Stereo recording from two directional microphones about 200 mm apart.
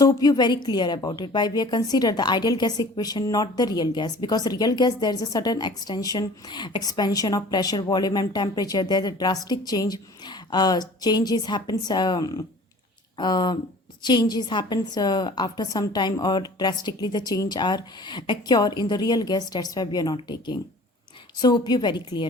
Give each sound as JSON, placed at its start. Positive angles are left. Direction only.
{"t": 0.0, "sound": "a woman's voice", "side_deg": 20}